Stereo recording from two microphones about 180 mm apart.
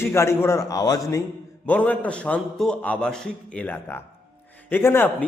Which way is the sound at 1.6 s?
10° left (ahead or behind).